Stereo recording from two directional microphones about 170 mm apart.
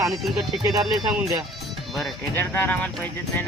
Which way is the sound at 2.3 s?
10° left (ahead or behind).